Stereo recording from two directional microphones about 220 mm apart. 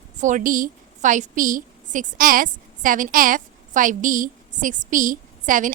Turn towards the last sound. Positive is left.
turn(degrees=-35)  # may be behind; listen again after turning